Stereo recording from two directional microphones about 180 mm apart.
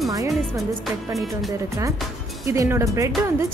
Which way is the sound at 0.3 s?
Centre (ahead or behind).